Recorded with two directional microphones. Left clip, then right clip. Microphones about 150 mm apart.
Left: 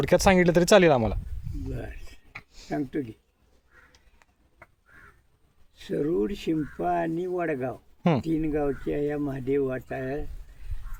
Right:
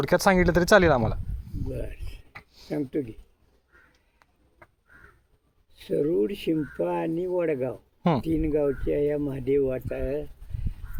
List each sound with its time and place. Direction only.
0.0 s speech: 30° left (ahead or behind)
1.7 s speech: 10° left (ahead or behind)
5.7 s speech: 15° left (ahead or behind)